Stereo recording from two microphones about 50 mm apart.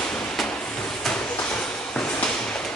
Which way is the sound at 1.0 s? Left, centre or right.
Left.